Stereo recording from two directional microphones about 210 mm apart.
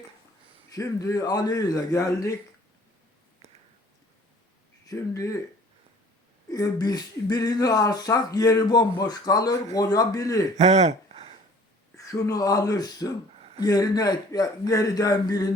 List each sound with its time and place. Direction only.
0.7 s speech: 15° left (ahead or behind)
4.9 s speech: 15° left (ahead or behind)
6.5 s speech: 15° left (ahead or behind)
10.6 s a sound: 30° right (ahead or behind)
11.9 s speech: 15° left (ahead or behind)